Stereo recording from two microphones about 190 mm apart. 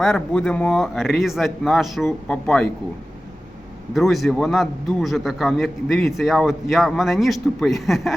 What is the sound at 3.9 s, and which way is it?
A man's voice, centre (ahead or behind).